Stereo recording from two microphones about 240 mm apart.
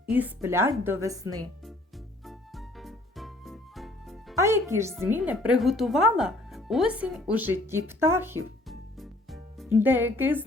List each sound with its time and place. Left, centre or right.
0.0 s a woman's voice: centre
2.2 s music: centre
4.4 s speech: centre
8.6 s music: centre
9.7 s a woman's voice: centre